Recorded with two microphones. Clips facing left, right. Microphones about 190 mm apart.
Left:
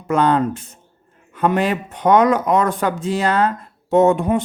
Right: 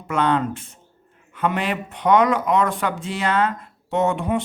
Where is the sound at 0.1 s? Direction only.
40° left (ahead or behind).